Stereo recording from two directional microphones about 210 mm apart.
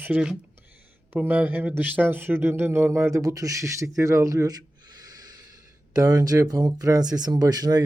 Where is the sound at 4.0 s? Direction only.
15° right (ahead or behind).